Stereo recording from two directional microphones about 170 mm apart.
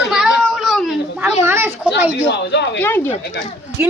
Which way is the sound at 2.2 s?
85° left.